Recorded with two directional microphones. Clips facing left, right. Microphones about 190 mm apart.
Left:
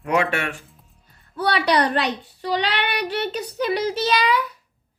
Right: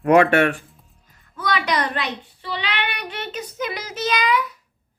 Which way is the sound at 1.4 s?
35° left (ahead or behind).